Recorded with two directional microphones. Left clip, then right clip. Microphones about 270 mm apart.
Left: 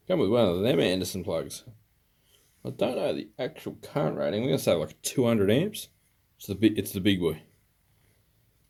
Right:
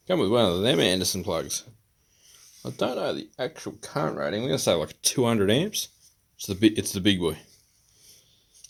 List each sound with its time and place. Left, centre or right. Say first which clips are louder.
0.0 s speech: right 1 dB; centre